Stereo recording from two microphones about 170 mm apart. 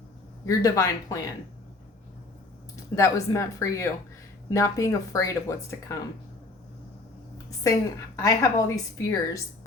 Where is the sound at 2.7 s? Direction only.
15° left (ahead or behind).